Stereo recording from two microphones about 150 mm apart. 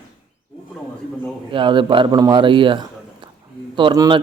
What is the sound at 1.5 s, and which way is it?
A man's voice, 35° right (ahead or behind).